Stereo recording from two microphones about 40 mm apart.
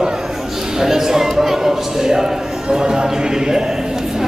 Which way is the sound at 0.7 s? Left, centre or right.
Centre.